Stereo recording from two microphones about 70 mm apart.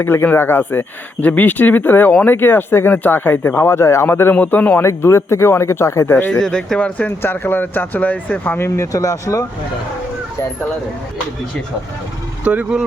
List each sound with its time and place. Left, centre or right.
0.0 s speech: left
4.8 s speech: left
6.1 s speech: left
6.4 s speech: centre
7.2 s speech: left
8.5 s speech: left
12.5 s speech: centre